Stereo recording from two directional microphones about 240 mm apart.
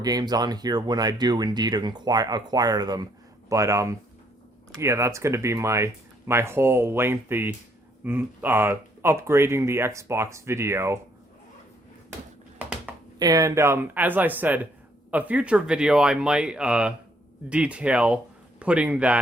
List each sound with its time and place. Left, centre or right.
0.0 s speech: centre
12.5 s a sound: centre
13.1 s speech: centre